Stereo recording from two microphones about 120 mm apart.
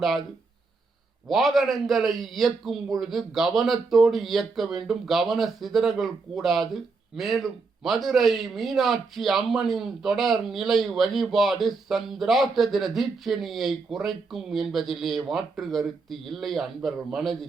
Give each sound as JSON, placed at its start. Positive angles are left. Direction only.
{"t": 1.3, "sound": "a man's voice", "side_deg": 0}